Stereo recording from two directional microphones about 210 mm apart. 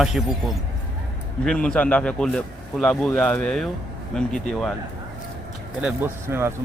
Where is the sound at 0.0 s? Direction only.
Centre (ahead or behind).